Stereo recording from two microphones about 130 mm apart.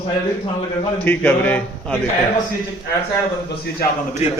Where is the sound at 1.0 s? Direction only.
15° left (ahead or behind).